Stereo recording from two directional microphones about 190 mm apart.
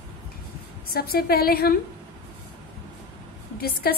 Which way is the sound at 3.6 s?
55° left (ahead or behind).